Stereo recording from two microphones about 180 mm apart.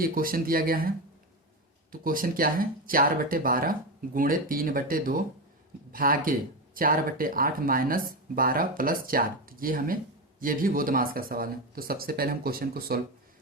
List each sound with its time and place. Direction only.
0.0 s speech: 55° right (ahead or behind)